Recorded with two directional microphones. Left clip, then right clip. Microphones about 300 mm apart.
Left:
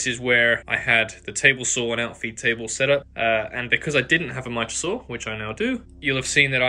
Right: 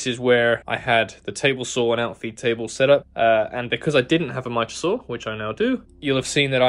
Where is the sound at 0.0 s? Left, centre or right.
Centre.